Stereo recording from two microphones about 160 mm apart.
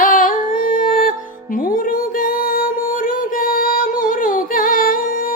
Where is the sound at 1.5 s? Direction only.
60° left (ahead or behind).